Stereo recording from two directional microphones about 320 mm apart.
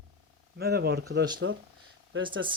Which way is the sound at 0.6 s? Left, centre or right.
Right.